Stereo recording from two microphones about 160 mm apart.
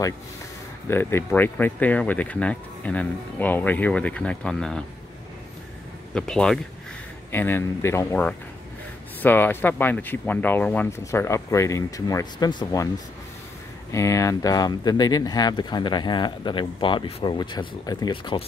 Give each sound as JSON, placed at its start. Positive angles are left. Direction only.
{"t": 0.8, "sound": "speech", "side_deg": 15}
{"t": 6.1, "sound": "speech", "side_deg": 5}
{"t": 13.9, "sound": "speech", "side_deg": 20}